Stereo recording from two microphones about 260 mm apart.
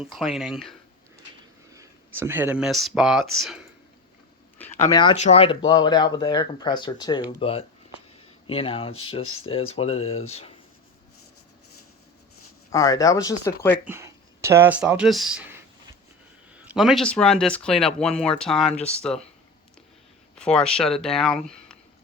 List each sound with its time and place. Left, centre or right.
0.0 s speech: centre
1.7 s speech: centre
4.9 s speech: centre
12.7 s speech: centre
13.8 s speech: centre
16.6 s speech: centre
20.4 s speech: centre